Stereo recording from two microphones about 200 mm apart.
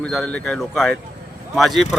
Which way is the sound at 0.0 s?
5° left (ahead or behind).